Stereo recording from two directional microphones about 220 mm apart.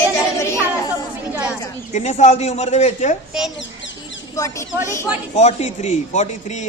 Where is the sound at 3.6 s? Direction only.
55° left (ahead or behind).